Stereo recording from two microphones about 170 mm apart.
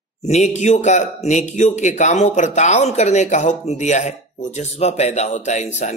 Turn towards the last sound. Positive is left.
turn(degrees=45)  # may be behind; listen again after turning